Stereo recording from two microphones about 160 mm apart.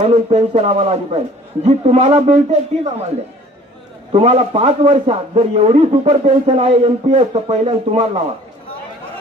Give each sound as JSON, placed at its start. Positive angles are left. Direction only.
{"t": 0.0, "sound": "a man's voice", "side_deg": -40}
{"t": 4.1, "sound": "a man's voice", "side_deg": -40}